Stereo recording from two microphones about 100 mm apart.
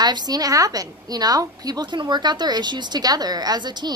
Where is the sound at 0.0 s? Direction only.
40° right (ahead or behind).